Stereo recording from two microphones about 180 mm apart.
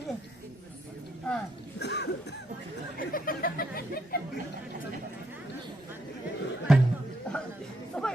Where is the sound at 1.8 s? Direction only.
70° left (ahead or behind).